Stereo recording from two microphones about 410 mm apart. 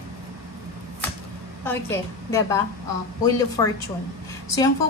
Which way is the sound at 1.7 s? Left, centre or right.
Centre.